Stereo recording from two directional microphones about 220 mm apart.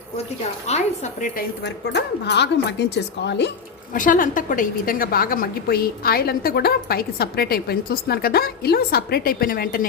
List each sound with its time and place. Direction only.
0.7 s a woman's voice: 35° left (ahead or behind)
1.6 s a woman's voice: 50° left (ahead or behind)
3.9 s a woman's voice: 35° left (ahead or behind)